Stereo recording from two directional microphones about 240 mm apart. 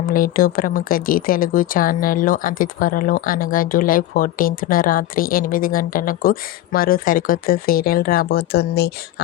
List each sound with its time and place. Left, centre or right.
0.1 s speech: left